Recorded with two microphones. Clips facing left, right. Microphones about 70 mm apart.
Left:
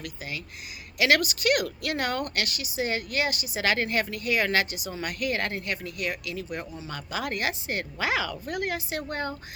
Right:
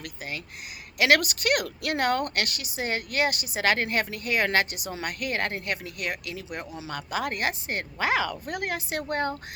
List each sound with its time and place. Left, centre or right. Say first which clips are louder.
0.0 s speech: even; right